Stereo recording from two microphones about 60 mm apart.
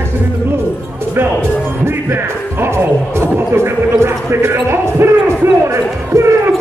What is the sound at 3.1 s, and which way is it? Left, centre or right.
Horse, right.